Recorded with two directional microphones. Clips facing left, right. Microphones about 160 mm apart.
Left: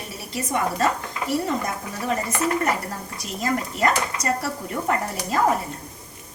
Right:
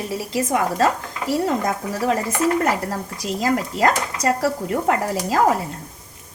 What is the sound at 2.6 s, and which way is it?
Speech, 90° right.